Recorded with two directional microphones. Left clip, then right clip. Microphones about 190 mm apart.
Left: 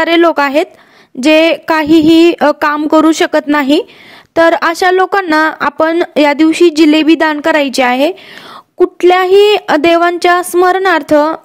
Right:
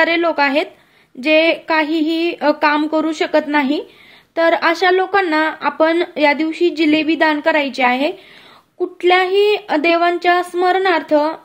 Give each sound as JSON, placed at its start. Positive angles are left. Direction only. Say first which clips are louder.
{"t": 0.0, "sound": "speech", "louder": "left 6 dB", "side_deg": 50}